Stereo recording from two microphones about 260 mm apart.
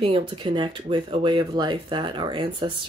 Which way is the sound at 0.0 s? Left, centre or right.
Centre.